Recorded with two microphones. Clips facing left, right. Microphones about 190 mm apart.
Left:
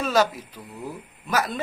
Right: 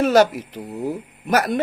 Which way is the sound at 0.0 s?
65° right (ahead or behind).